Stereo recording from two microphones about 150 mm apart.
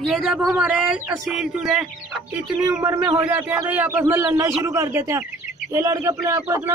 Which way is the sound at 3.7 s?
10° right (ahead or behind).